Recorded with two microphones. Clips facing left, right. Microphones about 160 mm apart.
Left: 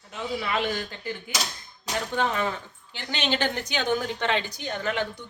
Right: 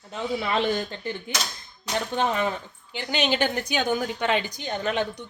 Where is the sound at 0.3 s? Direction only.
30° right (ahead or behind).